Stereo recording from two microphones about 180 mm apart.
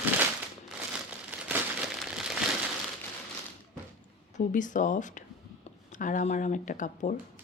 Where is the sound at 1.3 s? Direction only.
10° right (ahead or behind).